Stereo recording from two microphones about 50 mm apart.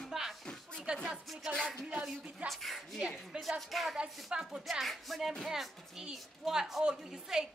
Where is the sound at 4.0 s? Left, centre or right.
Centre.